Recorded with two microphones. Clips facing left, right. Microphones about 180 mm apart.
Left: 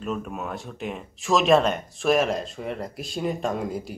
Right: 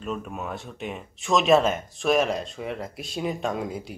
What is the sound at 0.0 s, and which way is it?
Speech, centre (ahead or behind).